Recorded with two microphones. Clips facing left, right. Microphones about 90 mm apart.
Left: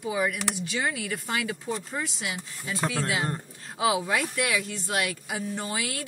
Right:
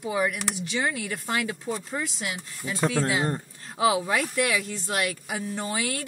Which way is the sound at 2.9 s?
35° right (ahead or behind).